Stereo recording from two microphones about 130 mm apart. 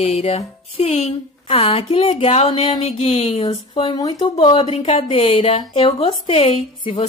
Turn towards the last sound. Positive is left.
turn(degrees=50)  # may be behind; listen again after turning